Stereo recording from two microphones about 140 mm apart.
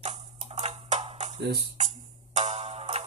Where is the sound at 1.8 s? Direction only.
55° right (ahead or behind).